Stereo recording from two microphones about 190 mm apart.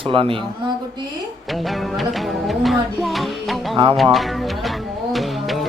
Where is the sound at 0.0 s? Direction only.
30° right (ahead or behind).